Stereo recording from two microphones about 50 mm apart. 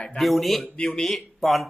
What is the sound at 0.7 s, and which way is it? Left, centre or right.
Speech, centre.